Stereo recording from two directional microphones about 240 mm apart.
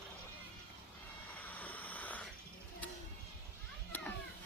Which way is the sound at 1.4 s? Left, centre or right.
Centre.